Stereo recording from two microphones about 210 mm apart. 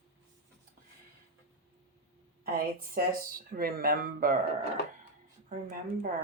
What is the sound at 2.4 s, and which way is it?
Speech, 45° right (ahead or behind).